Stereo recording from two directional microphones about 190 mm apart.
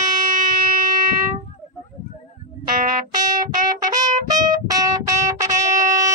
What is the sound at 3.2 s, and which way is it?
Music, 20° right (ahead or behind).